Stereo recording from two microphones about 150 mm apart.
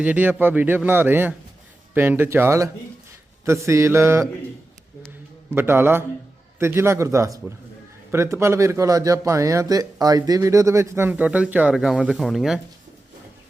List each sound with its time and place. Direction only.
0.0 s a man's voice: 10° right (ahead or behind)
5.5 s a man's voice: 15° right (ahead or behind)